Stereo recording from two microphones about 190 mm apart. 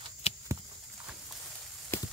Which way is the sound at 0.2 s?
35° left (ahead or behind).